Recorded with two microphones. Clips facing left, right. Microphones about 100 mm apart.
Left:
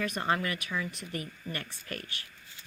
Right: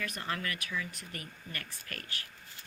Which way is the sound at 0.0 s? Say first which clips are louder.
Left 7 dB; 25° left (ahead or behind).